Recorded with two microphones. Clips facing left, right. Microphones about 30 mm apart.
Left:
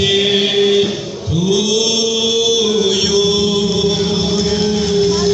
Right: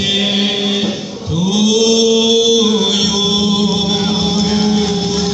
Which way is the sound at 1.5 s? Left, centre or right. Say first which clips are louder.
Right 3 dB; right.